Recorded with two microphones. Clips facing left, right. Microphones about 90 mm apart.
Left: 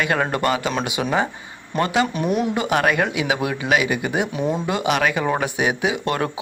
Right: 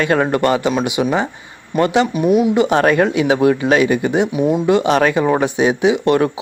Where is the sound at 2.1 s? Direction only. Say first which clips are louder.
Right 7 dB; 5° right (ahead or behind).